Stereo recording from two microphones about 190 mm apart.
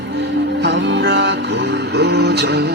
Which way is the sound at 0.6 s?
65° right (ahead or behind).